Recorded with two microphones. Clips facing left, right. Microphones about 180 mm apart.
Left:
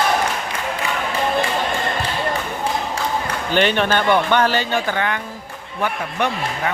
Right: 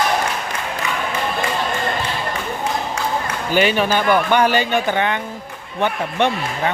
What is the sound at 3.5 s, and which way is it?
Speech, 5° right (ahead or behind).